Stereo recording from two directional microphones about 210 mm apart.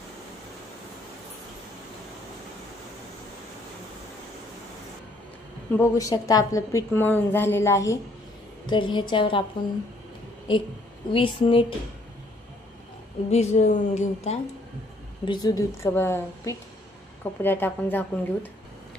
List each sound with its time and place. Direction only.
5.8 s a woman's voice: 15° left (ahead or behind)
11.1 s speech: 25° left (ahead or behind)
13.3 s a woman's voice: 30° left (ahead or behind)
15.2 s a woman's voice: 20° left (ahead or behind)